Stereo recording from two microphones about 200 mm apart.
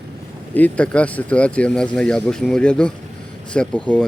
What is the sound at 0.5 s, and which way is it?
Speech, 5° left (ahead or behind).